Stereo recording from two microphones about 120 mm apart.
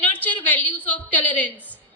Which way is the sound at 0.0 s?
15° left (ahead or behind).